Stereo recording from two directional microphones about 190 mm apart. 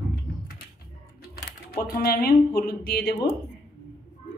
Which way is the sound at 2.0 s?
55° left (ahead or behind).